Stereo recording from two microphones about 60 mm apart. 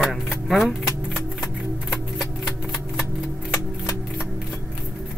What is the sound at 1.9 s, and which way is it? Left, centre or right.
Typewriter, centre.